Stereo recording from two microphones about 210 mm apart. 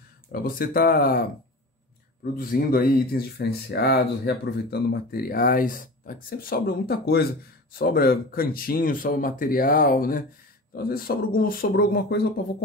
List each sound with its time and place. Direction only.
0.3 s speech: 45° left (ahead or behind)
2.3 s speech: 45° left (ahead or behind)